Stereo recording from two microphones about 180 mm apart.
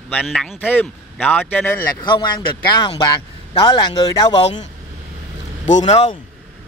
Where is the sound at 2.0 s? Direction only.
25° left (ahead or behind).